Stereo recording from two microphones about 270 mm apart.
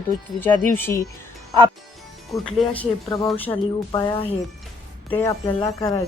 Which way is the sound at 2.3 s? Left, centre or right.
Centre.